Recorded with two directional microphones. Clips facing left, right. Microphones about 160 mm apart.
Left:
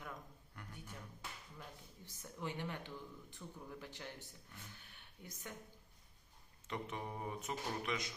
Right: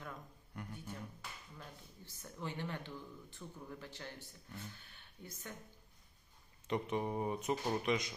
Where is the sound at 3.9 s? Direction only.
15° left (ahead or behind).